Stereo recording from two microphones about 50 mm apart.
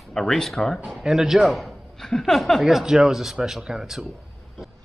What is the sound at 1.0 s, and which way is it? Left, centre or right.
A man's voice, centre.